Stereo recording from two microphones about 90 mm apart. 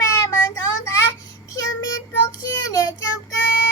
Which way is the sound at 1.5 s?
40° left (ahead or behind).